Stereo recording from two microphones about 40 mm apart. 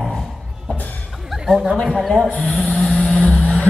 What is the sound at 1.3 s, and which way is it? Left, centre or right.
Chuckle, centre.